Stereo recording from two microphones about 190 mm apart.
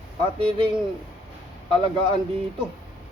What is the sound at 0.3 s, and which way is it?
Speech, 25° right (ahead or behind).